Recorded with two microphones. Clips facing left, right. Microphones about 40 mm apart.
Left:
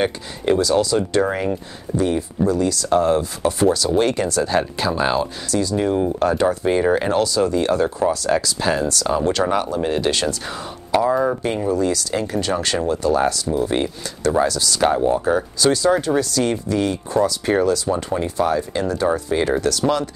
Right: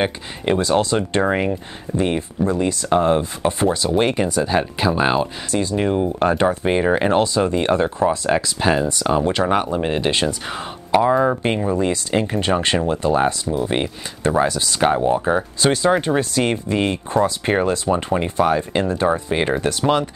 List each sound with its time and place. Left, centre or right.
0.0 s speech: right
2.0 s chopping: right
14.8 s chopping: centre
16.2 s speech: right